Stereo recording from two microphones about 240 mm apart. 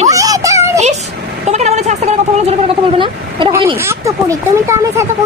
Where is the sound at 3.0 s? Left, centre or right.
Right.